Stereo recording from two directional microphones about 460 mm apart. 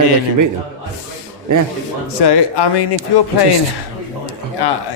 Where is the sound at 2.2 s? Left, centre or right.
Left.